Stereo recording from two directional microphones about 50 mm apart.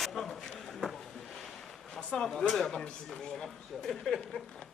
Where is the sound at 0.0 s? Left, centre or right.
Centre.